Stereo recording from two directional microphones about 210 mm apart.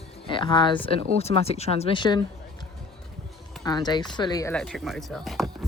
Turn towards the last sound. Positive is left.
turn(degrees=0)  # may be behind; listen again after turning